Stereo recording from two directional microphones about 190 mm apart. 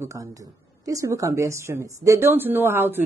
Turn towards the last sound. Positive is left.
turn(degrees=-10)  # may be behind; listen again after turning